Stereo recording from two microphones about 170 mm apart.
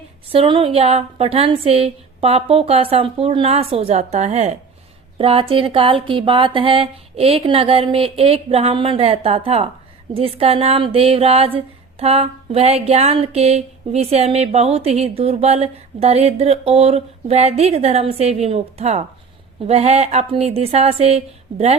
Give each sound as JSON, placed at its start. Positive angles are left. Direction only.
{"t": 0.3, "sound": "speech", "side_deg": -30}